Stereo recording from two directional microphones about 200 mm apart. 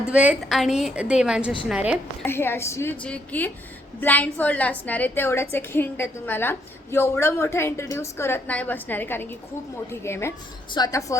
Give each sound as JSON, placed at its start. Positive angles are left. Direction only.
{"t": 0.0, "sound": "a woman's voice", "side_deg": -5}
{"t": 2.2, "sound": "a woman's voice", "side_deg": 10}